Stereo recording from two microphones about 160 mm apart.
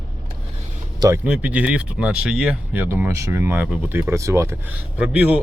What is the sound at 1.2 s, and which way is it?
Speech, 10° right (ahead or behind).